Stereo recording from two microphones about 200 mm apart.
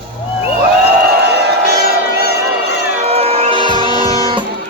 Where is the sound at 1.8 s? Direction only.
50° left (ahead or behind).